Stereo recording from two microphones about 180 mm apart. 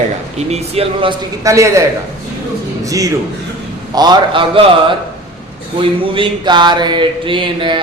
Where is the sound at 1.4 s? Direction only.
15° right (ahead or behind).